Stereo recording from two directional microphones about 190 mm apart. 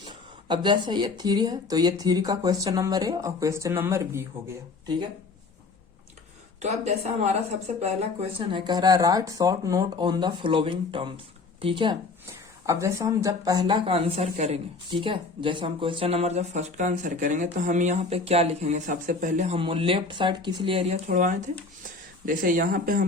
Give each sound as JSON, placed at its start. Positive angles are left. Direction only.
{"t": 0.4, "sound": "speech", "side_deg": -25}
{"t": 6.6, "sound": "speech", "side_deg": -35}
{"t": 19.5, "sound": "speech", "side_deg": -30}
{"t": 21.1, "sound": "speech", "side_deg": -45}